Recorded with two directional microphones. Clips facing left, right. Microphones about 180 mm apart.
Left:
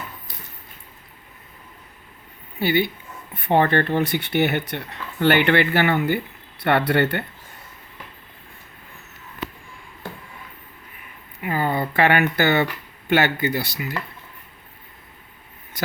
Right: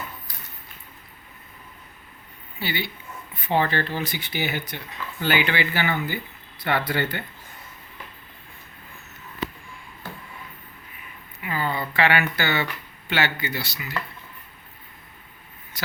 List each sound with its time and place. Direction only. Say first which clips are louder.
2.6 s speech: left 9 dB; 55° left (ahead or behind)
11.4 s speech: left 5 dB; 50° left (ahead or behind)